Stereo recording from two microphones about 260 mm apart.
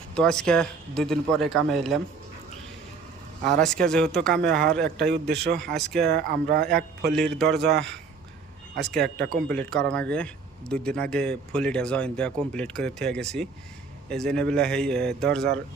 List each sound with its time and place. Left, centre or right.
0.1 s speech: centre
3.6 s speech: centre
5.1 s speech: right
5.5 s speech: centre
6.1 s speech: right
7.2 s speech: centre
8.7 s speech: centre